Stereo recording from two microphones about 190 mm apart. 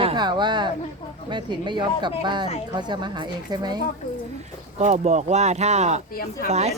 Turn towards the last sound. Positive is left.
turn(degrees=-35)  # may be behind; listen again after turning